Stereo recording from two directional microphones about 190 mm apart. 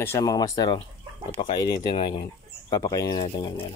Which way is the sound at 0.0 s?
15° left (ahead or behind).